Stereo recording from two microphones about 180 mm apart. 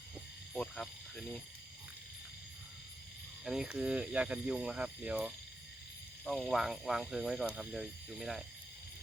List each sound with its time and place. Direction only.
0.5 s frog: 5° left (ahead or behind)
3.4 s speech: 5° right (ahead or behind)